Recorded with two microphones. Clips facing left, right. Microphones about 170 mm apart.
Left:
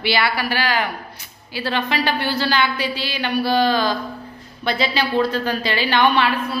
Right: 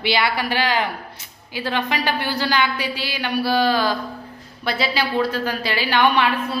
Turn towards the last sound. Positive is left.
turn(degrees=-10)  # may be behind; listen again after turning